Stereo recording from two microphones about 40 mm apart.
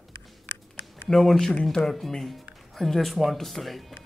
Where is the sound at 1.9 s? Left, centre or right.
Centre.